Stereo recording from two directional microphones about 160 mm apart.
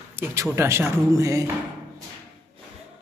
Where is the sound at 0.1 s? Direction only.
15° right (ahead or behind).